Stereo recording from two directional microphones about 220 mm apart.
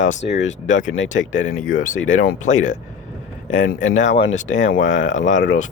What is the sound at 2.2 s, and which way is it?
Speech, 35° left (ahead or behind).